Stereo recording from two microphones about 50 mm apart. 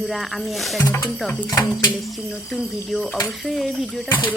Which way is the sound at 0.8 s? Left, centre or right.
Left.